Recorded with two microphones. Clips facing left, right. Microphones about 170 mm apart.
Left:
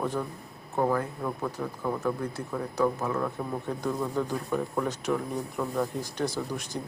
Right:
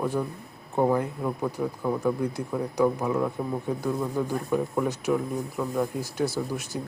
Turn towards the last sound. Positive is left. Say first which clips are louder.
# right 2 dB
turn(degrees=-5)  # may be behind; listen again after turning